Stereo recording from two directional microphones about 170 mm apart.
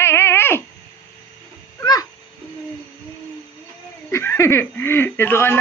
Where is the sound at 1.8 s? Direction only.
25° left (ahead or behind).